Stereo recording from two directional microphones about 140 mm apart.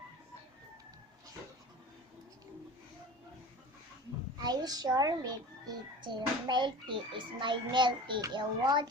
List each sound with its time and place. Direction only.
4.4 s a child's voice: 30° right (ahead or behind)